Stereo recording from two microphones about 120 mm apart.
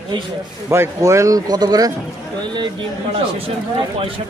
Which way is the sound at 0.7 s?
25° right (ahead or behind).